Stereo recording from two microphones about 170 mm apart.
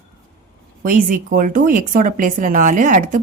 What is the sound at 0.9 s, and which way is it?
Speech, 50° right (ahead or behind).